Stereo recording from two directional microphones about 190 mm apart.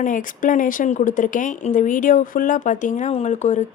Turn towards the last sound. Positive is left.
turn(degrees=40)  # may be behind; listen again after turning